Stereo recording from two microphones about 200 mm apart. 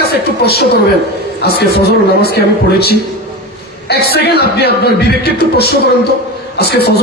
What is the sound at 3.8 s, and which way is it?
A man's voice, 55° left (ahead or behind).